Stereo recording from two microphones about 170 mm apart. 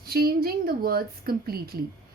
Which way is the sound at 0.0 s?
60° right (ahead or behind).